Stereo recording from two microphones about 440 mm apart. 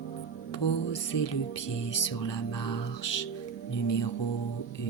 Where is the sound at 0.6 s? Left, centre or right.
Left.